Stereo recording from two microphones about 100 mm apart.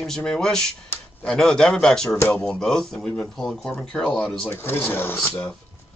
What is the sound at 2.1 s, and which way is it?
Speech, 20° left (ahead or behind).